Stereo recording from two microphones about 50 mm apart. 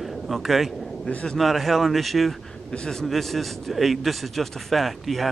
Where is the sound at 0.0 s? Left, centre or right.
Centre.